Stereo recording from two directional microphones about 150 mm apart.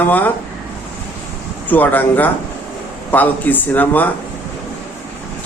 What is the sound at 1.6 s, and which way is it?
Speech, 10° left (ahead or behind).